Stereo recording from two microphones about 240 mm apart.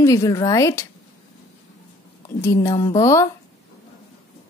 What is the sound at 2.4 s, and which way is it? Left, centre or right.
Speech, centre.